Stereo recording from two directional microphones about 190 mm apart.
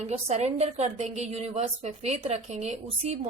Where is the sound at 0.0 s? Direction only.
35° right (ahead or behind).